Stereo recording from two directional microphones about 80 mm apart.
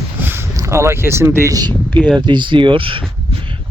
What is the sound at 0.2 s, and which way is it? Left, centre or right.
Boat, right.